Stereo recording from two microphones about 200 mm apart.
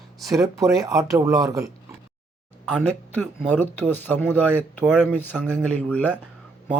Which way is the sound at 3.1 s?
10° left (ahead or behind).